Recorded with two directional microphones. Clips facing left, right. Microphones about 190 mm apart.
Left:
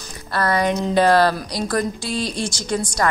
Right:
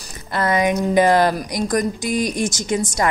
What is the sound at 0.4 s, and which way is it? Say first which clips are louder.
A woman's voice: right 1 dB; 20° right (ahead or behind).